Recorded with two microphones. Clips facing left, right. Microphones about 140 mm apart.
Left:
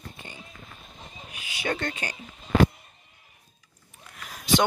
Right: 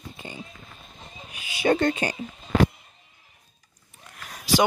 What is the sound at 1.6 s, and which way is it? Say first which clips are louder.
Speech: right 9 dB; 30° right (ahead or behind).